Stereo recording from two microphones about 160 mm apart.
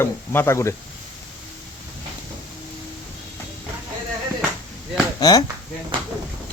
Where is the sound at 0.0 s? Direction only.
15° left (ahead or behind).